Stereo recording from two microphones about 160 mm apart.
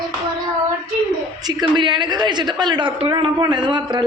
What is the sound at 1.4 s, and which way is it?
A man's voice, 25° right (ahead or behind).